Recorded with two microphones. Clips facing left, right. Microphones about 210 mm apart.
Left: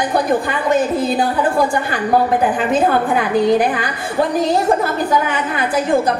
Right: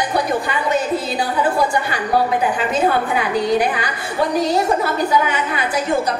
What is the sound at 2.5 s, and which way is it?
A woman's voice, 50° left (ahead or behind).